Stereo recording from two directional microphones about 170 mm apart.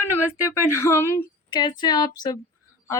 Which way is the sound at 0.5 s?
15° left (ahead or behind).